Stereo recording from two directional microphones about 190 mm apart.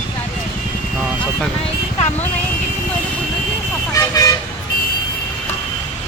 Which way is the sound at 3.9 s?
15° left (ahead or behind).